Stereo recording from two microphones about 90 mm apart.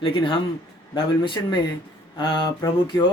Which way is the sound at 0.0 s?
70° left (ahead or behind).